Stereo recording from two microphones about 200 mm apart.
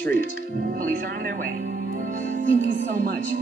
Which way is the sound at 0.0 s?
45° right (ahead or behind).